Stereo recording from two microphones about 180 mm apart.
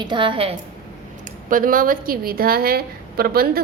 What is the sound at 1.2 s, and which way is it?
Speech, 50° right (ahead or behind).